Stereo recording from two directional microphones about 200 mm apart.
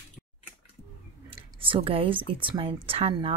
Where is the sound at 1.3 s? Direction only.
25° right (ahead or behind).